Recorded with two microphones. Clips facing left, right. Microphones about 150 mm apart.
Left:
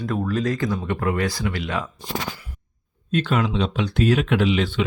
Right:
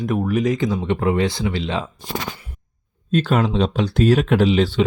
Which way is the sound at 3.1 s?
40° right (ahead or behind).